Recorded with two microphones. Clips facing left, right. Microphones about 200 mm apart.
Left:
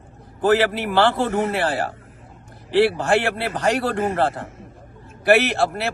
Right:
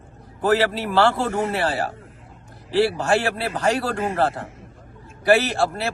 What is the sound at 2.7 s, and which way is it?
A man's voice, 20° left (ahead or behind).